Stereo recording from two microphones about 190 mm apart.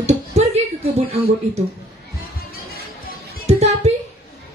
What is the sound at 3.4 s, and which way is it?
Music, 35° right (ahead or behind).